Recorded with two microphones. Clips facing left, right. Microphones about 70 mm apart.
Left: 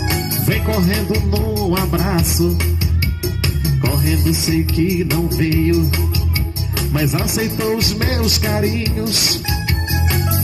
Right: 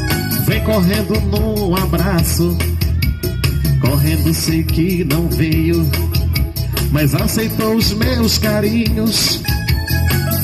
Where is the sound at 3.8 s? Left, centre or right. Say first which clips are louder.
Right 2 dB; centre.